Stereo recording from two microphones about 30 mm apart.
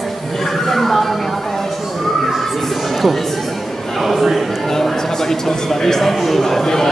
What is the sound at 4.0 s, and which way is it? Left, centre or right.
Speech, centre.